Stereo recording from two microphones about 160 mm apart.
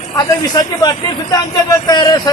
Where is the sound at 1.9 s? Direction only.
25° left (ahead or behind).